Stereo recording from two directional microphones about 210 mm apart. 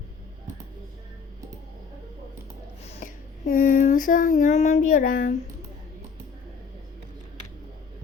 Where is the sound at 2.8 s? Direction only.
35° left (ahead or behind).